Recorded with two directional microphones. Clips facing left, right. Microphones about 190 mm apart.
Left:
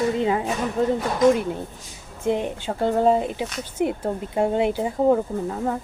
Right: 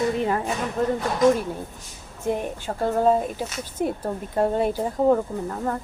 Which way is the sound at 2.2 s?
20° left (ahead or behind).